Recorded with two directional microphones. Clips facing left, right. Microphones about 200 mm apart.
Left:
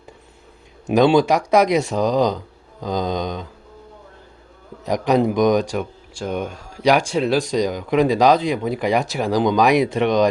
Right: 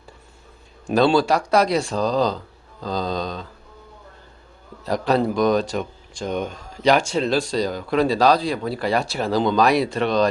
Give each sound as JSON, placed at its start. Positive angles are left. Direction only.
{"t": 0.9, "sound": "speech", "side_deg": 20}
{"t": 4.8, "sound": "speech", "side_deg": 15}